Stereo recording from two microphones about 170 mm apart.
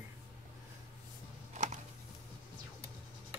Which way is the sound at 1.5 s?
45° right (ahead or behind).